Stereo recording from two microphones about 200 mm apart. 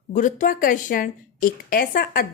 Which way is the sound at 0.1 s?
40° left (ahead or behind).